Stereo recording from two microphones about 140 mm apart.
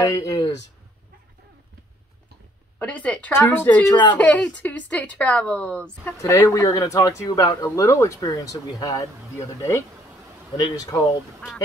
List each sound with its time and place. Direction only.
0.0 s speech: 25° left (ahead or behind)
2.8 s speech: 10° left (ahead or behind)
3.9 s speech: 35° left (ahead or behind)
4.2 s speech: 10° left (ahead or behind)
6.1 s speech: 20° left (ahead or behind)
10.6 s speech: 25° left (ahead or behind)